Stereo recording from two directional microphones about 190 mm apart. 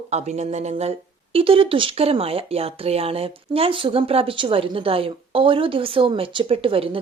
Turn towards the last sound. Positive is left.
turn(degrees=-30)  # may be behind; listen again after turning